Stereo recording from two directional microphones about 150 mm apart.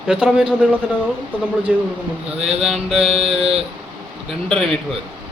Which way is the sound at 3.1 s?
40° right (ahead or behind).